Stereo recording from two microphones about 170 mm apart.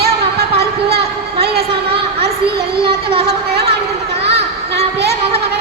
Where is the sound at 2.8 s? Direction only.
35° right (ahead or behind).